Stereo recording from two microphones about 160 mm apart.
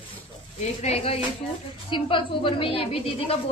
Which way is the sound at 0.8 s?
40° left (ahead or behind).